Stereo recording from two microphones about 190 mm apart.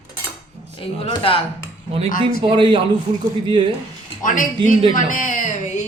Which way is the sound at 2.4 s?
25° right (ahead or behind).